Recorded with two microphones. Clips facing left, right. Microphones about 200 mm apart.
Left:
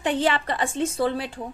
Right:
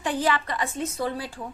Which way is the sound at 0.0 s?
25° left (ahead or behind).